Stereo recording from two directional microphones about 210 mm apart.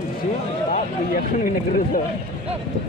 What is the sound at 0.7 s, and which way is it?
Speech, 40° left (ahead or behind).